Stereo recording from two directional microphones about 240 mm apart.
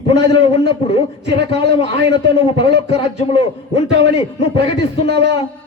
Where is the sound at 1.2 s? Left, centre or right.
Right.